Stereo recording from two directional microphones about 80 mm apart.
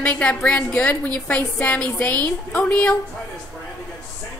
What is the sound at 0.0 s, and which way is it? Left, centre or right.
A woman's voice, centre.